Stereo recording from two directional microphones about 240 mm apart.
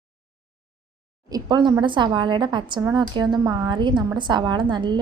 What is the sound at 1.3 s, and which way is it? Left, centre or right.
A woman's voice, centre.